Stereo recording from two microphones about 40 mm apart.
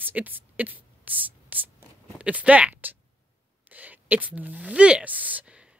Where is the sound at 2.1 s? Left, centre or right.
Right.